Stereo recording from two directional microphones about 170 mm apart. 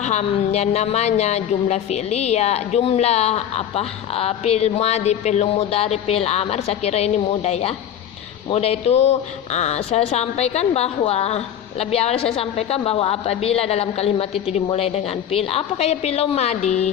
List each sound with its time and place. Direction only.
0.0 s speech: 40° left (ahead or behind)